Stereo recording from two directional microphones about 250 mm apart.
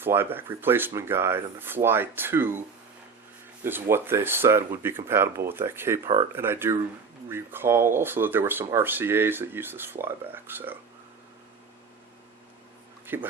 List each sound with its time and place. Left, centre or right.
0.0 s speech: centre
13.1 s speech: centre